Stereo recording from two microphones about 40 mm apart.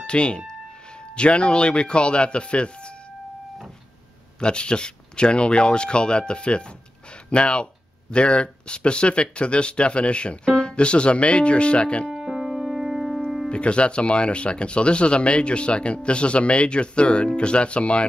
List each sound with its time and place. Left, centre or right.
0.0 s speech: left
4.4 s speech: left
12.1 s keyboard: centre
13.5 s speech: left